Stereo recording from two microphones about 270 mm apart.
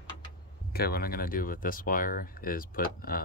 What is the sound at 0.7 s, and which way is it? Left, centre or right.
Speech, left.